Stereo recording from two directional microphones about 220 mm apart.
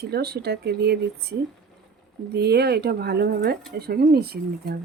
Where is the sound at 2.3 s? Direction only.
50° right (ahead or behind).